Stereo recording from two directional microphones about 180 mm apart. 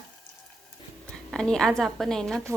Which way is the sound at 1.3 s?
5° left (ahead or behind).